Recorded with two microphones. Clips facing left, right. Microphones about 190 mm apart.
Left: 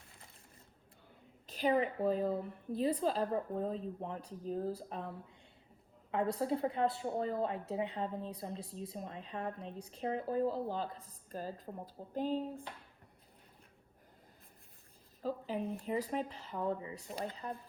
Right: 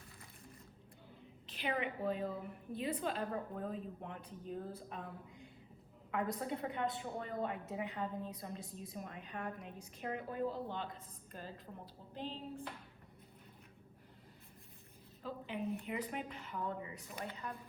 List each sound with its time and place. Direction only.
1.5 s a woman's voice: 40° left (ahead or behind)
12.1 s a sound: 45° left (ahead or behind)
15.2 s a woman's voice: 35° left (ahead or behind)